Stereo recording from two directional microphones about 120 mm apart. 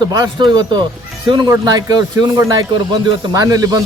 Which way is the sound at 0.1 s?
35° right (ahead or behind).